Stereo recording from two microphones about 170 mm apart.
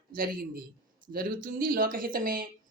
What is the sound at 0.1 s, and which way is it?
Speech, 55° right (ahead or behind).